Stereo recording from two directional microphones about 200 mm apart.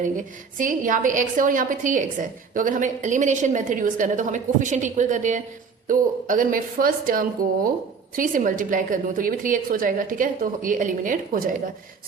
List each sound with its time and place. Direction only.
0.0 s a woman's voice: 40° right (ahead or behind)